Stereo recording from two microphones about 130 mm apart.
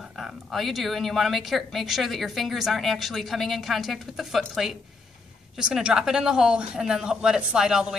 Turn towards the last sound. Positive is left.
turn(degrees=-5)  # may be behind; listen again after turning